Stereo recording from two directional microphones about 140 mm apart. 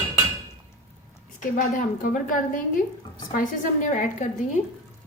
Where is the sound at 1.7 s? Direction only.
70° left (ahead or behind).